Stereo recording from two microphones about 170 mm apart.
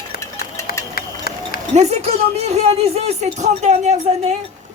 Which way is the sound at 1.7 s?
40° right (ahead or behind).